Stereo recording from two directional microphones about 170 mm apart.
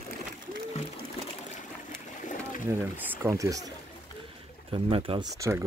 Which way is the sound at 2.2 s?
50° left (ahead or behind).